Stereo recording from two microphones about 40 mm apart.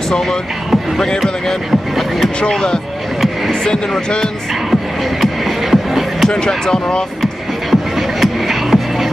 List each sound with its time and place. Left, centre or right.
0.9 s speech: centre
1.7 s speech: centre
2.5 s speech: centre
5.2 s music: centre
6.2 s speech: centre
7.7 s music: centre